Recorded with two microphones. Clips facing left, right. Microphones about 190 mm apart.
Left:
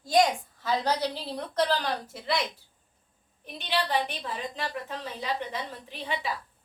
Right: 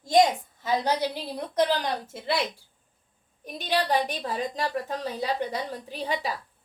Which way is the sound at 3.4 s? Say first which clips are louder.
Right 3 dB; 40° right (ahead or behind).